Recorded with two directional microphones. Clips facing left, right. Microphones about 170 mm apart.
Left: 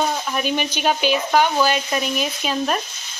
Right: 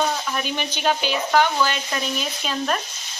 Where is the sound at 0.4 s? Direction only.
15° left (ahead or behind).